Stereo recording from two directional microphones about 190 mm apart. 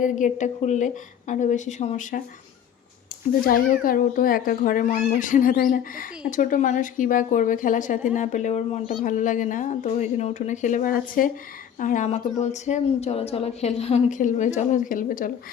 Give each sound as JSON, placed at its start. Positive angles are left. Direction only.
{"t": 0.0, "sound": "a woman's voice", "side_deg": 40}
{"t": 3.4, "sound": "a child's voice", "side_deg": 50}